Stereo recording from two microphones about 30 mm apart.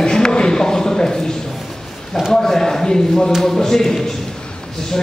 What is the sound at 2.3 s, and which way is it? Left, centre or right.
A man's voice, centre.